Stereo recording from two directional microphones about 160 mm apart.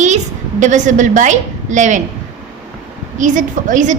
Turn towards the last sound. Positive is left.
turn(degrees=-55)  # may be behind; listen again after turning